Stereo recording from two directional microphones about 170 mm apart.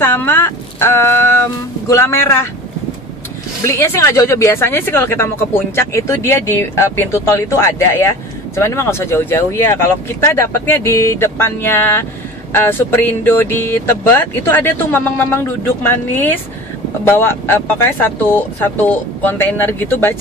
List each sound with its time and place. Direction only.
0.0 s speech: 10° left (ahead or behind)
3.6 s speech: 15° left (ahead or behind)